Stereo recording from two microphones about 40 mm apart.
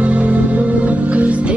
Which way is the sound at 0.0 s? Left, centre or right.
Right.